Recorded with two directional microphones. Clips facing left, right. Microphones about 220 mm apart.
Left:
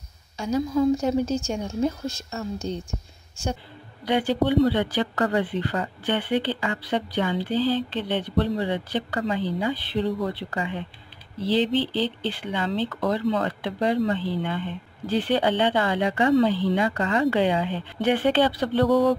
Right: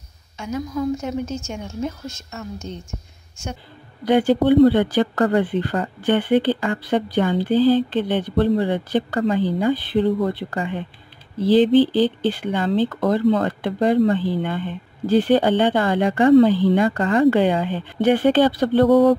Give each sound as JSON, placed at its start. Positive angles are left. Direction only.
{"t": 0.4, "sound": "a woman's voice", "side_deg": 30}
{"t": 4.0, "sound": "speech", "side_deg": -45}